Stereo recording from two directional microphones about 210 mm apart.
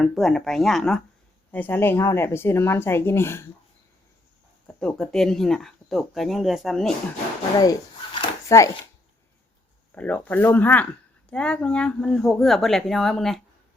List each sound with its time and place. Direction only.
0.0 s speech: centre (ahead or behind)
4.8 s speech: 5° left (ahead or behind)
7.6 s a sound: 15° left (ahead or behind)
9.9 s speech: 5° left (ahead or behind)